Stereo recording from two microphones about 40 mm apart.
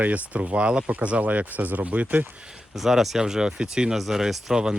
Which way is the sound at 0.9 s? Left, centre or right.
Right.